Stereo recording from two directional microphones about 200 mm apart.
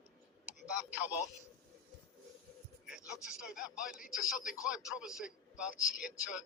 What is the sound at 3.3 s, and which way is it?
A man's voice, 5° right (ahead or behind).